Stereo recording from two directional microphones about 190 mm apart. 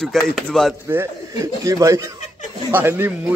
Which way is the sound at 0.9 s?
15° right (ahead or behind).